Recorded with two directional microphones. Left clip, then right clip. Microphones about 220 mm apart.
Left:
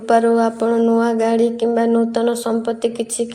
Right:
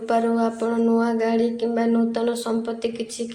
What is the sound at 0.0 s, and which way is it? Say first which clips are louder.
A woman's voice: left 7 dB; 25° left (ahead or behind).